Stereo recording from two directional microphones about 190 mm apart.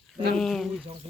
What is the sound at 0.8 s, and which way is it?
Speech, 35° right (ahead or behind).